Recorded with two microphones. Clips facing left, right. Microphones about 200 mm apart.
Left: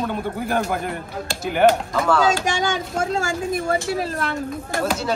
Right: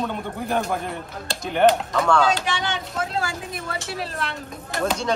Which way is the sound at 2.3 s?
45° left (ahead or behind).